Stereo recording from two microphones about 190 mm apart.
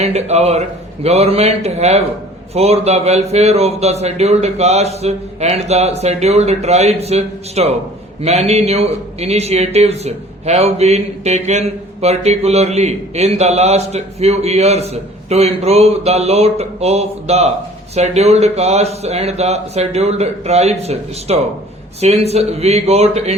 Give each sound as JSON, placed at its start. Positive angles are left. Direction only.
{"t": 0.0, "sound": "a man's voice", "side_deg": -35}